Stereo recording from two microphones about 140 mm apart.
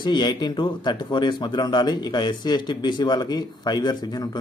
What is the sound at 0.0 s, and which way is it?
Speech, 30° left (ahead or behind).